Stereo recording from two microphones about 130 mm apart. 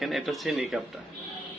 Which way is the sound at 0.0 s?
Centre (ahead or behind).